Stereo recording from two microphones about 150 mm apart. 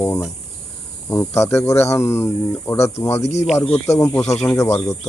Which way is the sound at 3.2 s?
45° left (ahead or behind).